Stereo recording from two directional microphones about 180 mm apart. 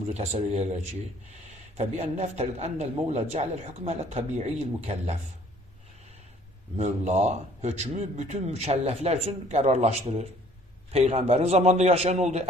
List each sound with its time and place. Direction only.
0.1 s a man's voice: 35° right (ahead or behind)
1.7 s a man's voice: 35° right (ahead or behind)
6.7 s a man's voice: 40° right (ahead or behind)